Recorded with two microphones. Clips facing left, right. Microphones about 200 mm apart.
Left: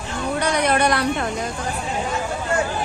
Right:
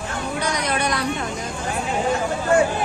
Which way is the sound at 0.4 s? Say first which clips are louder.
Left 5 dB; 60° left (ahead or behind).